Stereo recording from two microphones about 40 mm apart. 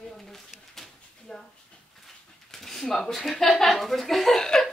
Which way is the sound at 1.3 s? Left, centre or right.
Centre.